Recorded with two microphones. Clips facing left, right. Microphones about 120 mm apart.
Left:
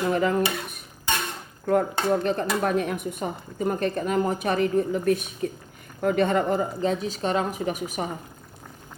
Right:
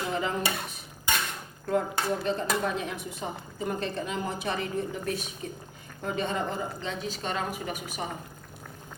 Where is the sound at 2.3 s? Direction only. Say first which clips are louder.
Left 4 dB; 60° left (ahead or behind).